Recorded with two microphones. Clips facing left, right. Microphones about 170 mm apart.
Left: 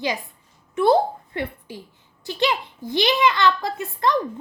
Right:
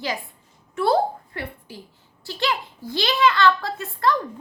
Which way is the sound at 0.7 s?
20° left (ahead or behind).